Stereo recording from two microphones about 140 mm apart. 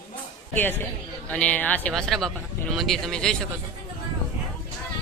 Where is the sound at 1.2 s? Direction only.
10° left (ahead or behind).